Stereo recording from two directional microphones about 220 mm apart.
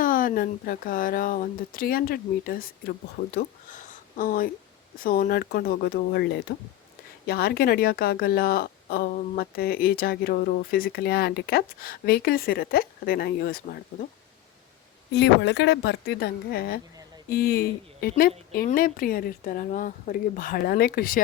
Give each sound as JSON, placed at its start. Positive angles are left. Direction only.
{"t": 0.0, "sound": "a woman's voice", "side_deg": 40}
{"t": 15.1, "sound": "a woman's voice", "side_deg": 50}